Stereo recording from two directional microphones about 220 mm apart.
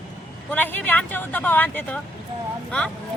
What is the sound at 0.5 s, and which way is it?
Speech, 10° left (ahead or behind).